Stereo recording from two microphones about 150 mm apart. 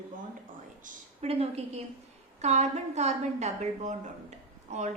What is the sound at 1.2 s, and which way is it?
A woman's voice, 45° right (ahead or behind).